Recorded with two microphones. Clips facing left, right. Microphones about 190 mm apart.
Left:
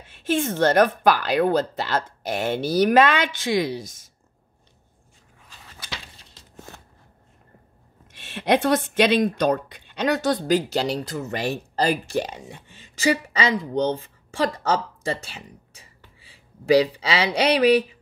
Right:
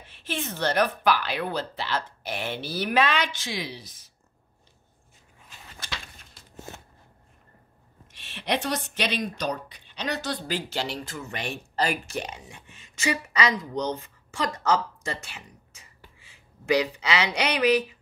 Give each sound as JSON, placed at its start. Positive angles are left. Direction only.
{"t": 0.1, "sound": "speech", "side_deg": 50}
{"t": 8.2, "sound": "speech", "side_deg": 50}